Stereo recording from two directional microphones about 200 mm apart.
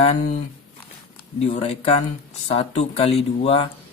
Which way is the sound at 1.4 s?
30° left (ahead or behind).